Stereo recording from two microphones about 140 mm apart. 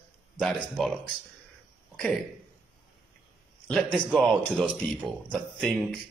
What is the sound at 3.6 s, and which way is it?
A man's voice, 5° left (ahead or behind).